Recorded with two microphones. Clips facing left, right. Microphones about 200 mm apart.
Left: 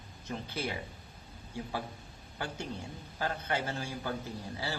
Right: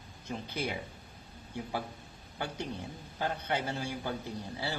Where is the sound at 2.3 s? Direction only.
15° right (ahead or behind).